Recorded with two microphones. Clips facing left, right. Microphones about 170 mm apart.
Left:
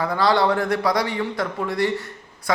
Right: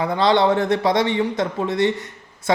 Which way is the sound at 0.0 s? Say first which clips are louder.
Right 2 dB; 20° right (ahead or behind).